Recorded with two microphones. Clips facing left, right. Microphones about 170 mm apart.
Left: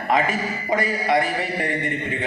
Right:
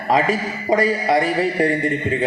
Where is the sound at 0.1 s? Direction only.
35° right (ahead or behind).